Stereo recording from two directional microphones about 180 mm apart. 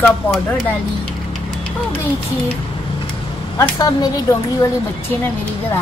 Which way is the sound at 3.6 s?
20° left (ahead or behind).